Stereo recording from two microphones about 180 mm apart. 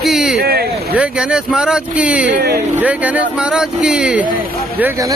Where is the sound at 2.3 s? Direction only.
60° right (ahead or behind).